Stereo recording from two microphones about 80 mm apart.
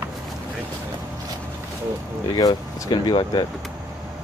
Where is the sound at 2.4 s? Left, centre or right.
Left.